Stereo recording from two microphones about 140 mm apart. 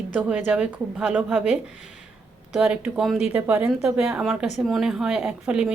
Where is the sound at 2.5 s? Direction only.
5° right (ahead or behind).